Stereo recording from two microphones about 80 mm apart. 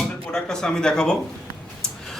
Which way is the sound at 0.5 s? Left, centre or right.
Centre.